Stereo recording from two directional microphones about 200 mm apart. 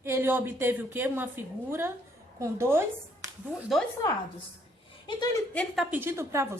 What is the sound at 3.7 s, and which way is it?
Speech, centre (ahead or behind).